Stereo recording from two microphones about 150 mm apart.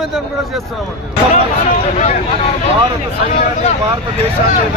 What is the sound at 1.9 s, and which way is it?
Speech, 45° left (ahead or behind).